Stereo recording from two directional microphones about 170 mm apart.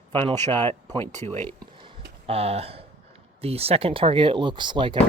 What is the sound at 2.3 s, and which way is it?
Speech, 35° right (ahead or behind).